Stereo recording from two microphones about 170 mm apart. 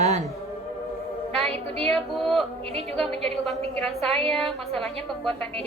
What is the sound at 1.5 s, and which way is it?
Speech, 35° right (ahead or behind).